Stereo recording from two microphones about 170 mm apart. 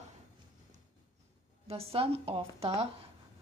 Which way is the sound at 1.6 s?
35° right (ahead or behind).